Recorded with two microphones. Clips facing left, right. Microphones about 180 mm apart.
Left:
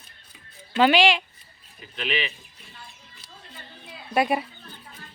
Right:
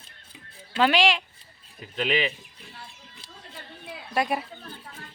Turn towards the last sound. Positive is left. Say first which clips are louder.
# left 3 dB
turn(degrees=5)  # may be behind; listen again after turning